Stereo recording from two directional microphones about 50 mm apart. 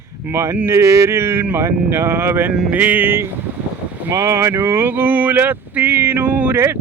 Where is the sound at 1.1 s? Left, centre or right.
Right.